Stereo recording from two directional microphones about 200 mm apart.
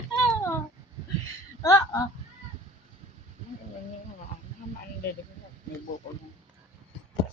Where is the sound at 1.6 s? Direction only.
15° left (ahead or behind).